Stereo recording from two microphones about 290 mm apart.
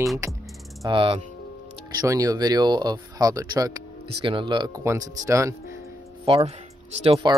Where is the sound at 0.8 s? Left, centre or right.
Centre.